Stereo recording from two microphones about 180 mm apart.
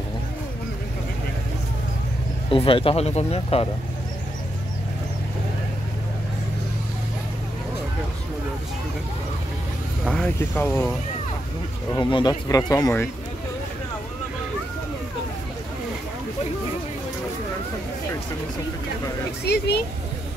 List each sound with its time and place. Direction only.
2.5 s speech: 30° left (ahead or behind)
10.0 s speech: 5° left (ahead or behind)
11.9 s speech: 25° left (ahead or behind)
19.4 s speech: 65° left (ahead or behind)